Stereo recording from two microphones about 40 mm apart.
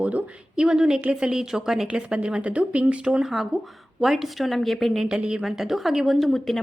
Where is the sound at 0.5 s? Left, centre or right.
Centre.